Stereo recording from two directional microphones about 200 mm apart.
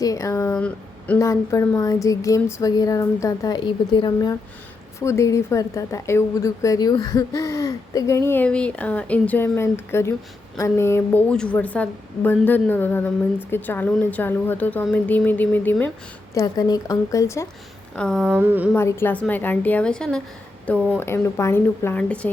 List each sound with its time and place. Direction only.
0.0 s a woman's voice: 15° left (ahead or behind)
17.9 s a sound: 5° left (ahead or behind)
18.7 s a woman's voice: 10° left (ahead or behind)